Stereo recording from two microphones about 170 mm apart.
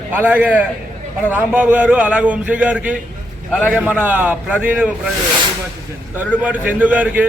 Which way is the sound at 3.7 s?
10° right (ahead or behind).